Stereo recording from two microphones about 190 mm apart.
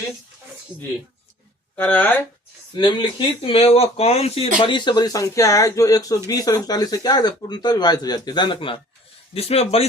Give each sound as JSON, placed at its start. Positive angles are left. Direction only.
{"t": 1.7, "sound": "speech", "side_deg": 10}
{"t": 2.7, "sound": "speech", "side_deg": 25}